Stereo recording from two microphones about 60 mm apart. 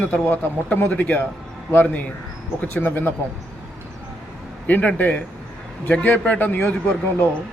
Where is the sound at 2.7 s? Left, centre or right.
Left.